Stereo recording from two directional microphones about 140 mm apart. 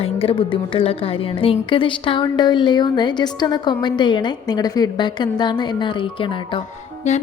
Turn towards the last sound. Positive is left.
turn(degrees=55)  # may be behind; listen again after turning